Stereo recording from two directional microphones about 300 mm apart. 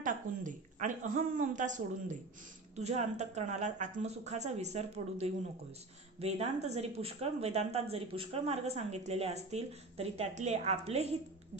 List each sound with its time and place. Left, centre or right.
0.0 s speech: right